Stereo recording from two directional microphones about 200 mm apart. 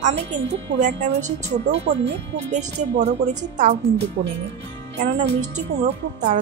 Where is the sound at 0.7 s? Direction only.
55° right (ahead or behind).